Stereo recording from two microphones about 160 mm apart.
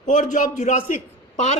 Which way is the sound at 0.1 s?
50° left (ahead or behind).